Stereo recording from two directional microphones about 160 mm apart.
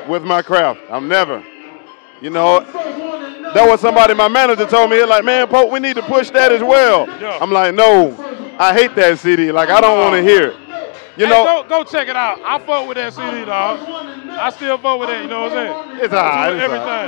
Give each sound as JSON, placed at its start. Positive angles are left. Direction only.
{"t": 0.1, "sound": "a man's voice", "side_deg": 15}